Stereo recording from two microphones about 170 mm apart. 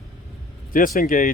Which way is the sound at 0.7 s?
55° left (ahead or behind).